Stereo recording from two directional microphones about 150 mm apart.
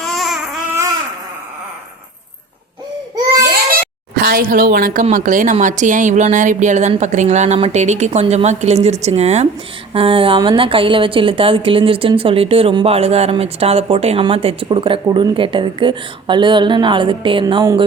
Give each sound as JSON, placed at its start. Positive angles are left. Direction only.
{"t": 0.0, "sound": "babbling", "side_deg": 0}
{"t": 3.8, "sound": "a sound", "side_deg": -80}
{"t": 5.1, "sound": "a woman's voice", "side_deg": -60}